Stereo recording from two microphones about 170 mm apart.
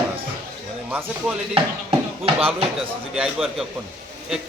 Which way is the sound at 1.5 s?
35° right (ahead or behind).